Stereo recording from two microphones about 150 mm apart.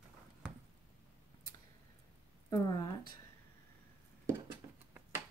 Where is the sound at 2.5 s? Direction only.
25° left (ahead or behind).